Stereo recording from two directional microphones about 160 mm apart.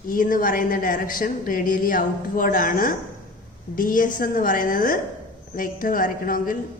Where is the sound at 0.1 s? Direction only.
60° left (ahead or behind).